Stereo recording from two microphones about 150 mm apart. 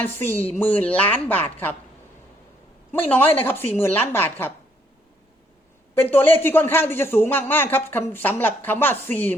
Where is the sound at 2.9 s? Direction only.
10° left (ahead or behind).